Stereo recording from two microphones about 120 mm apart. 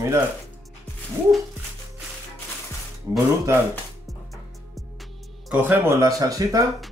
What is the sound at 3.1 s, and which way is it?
Speech, 25° right (ahead or behind).